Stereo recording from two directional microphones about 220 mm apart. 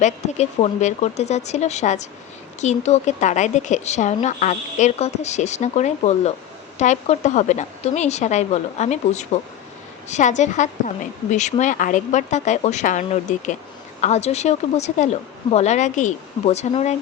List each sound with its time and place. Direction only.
0.0 s a woman's voice: 30° left (ahead or behind)